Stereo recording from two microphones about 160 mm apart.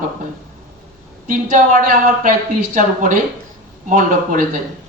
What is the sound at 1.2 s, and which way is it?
A woman's voice, 55° right (ahead or behind).